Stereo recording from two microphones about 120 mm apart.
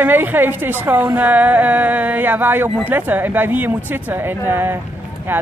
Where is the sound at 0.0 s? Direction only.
15° right (ahead or behind).